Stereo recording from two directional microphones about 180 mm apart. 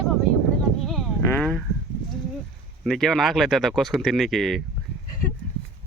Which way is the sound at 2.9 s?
Centre (ahead or behind).